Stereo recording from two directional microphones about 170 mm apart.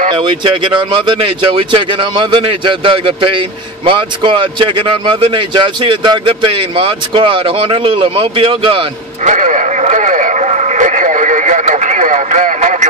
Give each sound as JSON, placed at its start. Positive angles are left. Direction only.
{"t": 0.1, "sound": "speech", "side_deg": -30}
{"t": 9.2, "sound": "radio", "side_deg": -45}